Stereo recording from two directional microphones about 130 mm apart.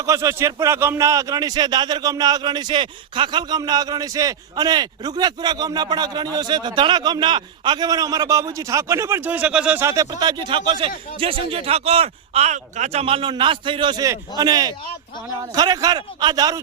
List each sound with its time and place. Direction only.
0.0 s speech: 25° right (ahead or behind); by 9.8 s 10° right (ahead or behind)
9.8 s speech: 25° right (ahead or behind); by 14.0 s 40° right (ahead or behind)
14.0 s a man's voice: 30° right (ahead or behind)